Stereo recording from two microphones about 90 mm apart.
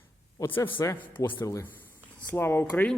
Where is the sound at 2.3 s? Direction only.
25° left (ahead or behind).